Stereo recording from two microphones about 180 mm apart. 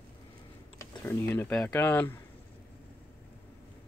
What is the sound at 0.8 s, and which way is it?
Speech, 10° left (ahead or behind).